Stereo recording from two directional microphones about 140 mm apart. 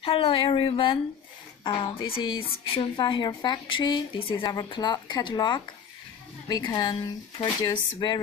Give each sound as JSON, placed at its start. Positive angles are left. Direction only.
{"t": 0.0, "sound": "speech", "side_deg": 45}